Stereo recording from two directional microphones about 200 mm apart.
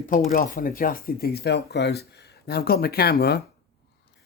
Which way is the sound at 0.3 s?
45° left (ahead or behind).